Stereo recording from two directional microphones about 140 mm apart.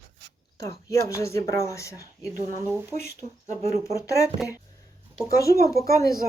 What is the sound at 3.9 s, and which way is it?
Speech, 20° left (ahead or behind).